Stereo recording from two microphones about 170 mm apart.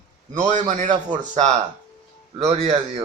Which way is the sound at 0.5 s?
45° right (ahead or behind).